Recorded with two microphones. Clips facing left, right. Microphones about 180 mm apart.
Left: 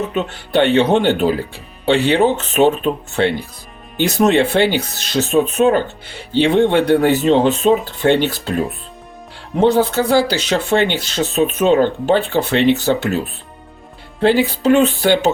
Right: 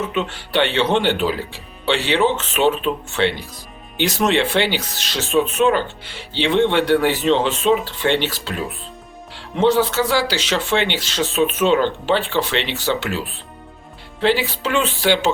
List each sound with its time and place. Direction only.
0.1 s speech: 45° left (ahead or behind)
9.6 s speech: 50° left (ahead or behind)
14.2 s speech: 50° left (ahead or behind)